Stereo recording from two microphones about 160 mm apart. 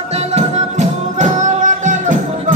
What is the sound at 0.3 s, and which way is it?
Music, 45° right (ahead or behind).